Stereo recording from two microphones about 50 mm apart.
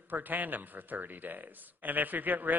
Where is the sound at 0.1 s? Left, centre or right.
Right.